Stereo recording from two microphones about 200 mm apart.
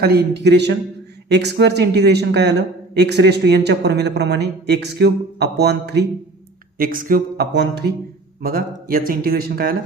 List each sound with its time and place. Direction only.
0.0 s speech: 55° right (ahead or behind)
6.7 s speech: 45° right (ahead or behind)